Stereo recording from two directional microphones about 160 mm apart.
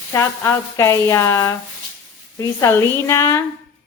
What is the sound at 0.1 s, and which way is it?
A woman's voice, 15° left (ahead or behind).